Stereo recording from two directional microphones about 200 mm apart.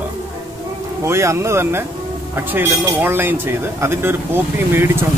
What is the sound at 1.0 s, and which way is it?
Speech, 15° right (ahead or behind).